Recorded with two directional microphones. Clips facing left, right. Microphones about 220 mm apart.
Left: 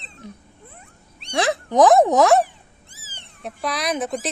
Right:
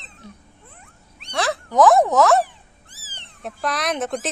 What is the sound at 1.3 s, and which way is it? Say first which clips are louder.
Speech: left 2 dB; 15° left (ahead or behind).